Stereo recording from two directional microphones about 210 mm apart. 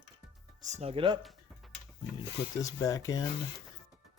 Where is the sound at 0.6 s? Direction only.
35° right (ahead or behind).